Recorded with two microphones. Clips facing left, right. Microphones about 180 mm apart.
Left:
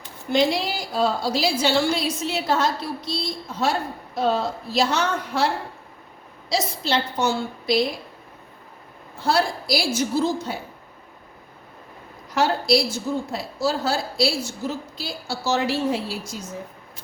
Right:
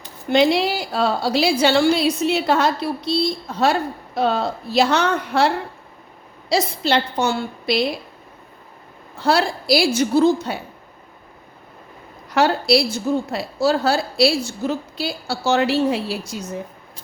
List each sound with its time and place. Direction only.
0.3 s a woman's voice: 65° right (ahead or behind)
9.1 s a woman's voice: 70° right (ahead or behind)
12.3 s a woman's voice: 70° right (ahead or behind)